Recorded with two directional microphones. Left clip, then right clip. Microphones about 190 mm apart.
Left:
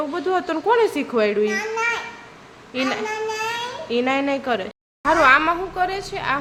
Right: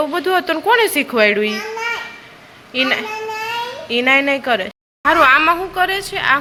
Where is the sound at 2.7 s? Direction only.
Centre (ahead or behind).